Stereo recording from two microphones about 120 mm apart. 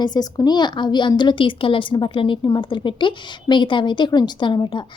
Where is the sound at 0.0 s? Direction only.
35° left (ahead or behind).